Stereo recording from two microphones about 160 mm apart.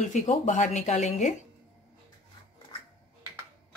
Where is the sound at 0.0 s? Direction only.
50° left (ahead or behind).